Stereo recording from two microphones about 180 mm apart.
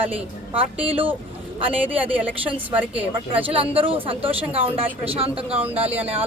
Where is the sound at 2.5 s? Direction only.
10° right (ahead or behind).